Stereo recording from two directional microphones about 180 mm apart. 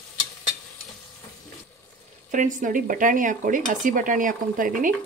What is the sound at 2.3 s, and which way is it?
Speech, 45° right (ahead or behind).